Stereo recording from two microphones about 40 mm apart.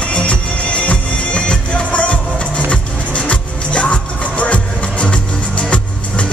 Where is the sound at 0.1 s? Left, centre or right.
Left.